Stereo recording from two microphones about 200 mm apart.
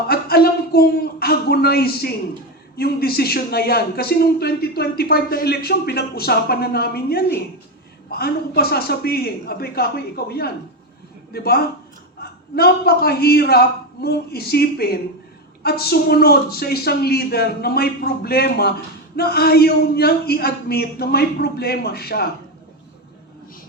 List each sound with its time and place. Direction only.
0.1 s a man's voice: 50° left (ahead or behind)